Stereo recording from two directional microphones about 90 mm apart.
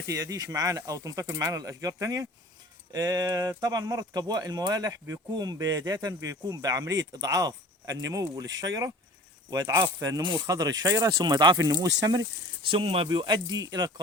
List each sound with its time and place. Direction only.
0.1 s speech: 40° right (ahead or behind)
12.7 s speech: 85° right
13.1 s speech: 55° right (ahead or behind)